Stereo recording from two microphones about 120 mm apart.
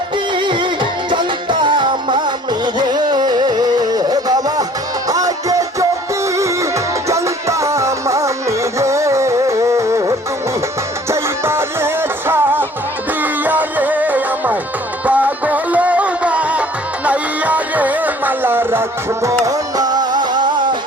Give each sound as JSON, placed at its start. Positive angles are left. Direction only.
{"t": 0.3, "sound": "music", "side_deg": -40}